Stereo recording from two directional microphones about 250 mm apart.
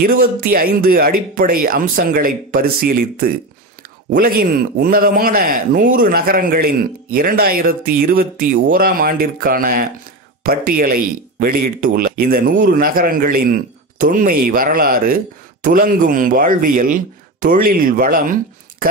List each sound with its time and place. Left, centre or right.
0.0 s a man's voice: right